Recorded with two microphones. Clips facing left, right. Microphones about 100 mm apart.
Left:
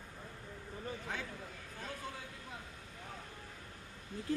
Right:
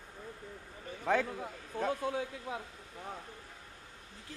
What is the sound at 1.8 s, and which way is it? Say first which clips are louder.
Speech: right 12 dB; 70° right (ahead or behind).